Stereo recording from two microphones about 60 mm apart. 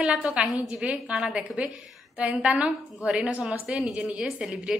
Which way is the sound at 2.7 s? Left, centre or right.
Centre.